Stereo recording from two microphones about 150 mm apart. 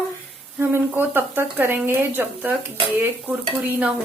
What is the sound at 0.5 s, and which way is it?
Speech, 15° right (ahead or behind).